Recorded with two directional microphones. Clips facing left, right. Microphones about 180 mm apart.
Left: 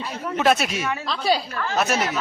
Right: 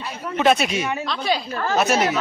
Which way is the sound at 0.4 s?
Centre (ahead or behind).